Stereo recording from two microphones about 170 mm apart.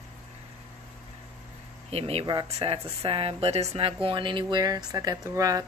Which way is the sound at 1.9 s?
35° right (ahead or behind).